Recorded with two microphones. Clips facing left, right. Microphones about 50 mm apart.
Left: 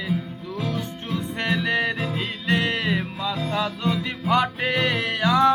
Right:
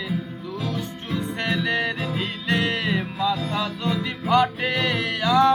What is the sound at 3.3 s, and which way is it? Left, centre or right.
Music, left.